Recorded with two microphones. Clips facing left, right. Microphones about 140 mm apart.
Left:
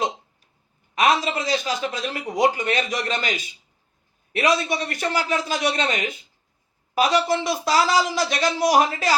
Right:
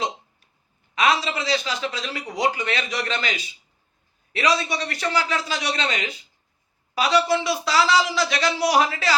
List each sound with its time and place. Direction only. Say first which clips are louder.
0.9 s a man's voice: left 2 dB; 50° left (ahead or behind)
4.7 s a man's voice: left 1 dB; 50° left (ahead or behind)